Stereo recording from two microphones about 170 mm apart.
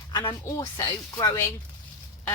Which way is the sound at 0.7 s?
20° left (ahead or behind).